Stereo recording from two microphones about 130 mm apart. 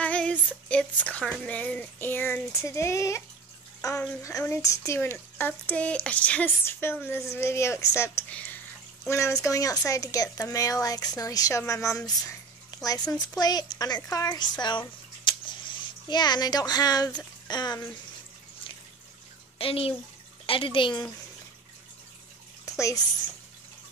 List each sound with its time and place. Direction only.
0.0 s a child's voice: 10° left (ahead or behind)
8.3 s a sound: 10° left (ahead or behind)
9.0 s a child's voice: 20° left (ahead or behind)
19.6 s speech: 45° left (ahead or behind)
22.8 s a child's voice: 25° left (ahead or behind)